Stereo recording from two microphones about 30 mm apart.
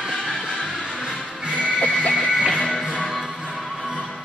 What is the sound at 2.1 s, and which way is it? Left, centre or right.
Music, centre.